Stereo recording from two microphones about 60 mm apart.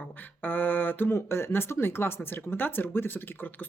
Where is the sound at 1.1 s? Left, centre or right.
Left.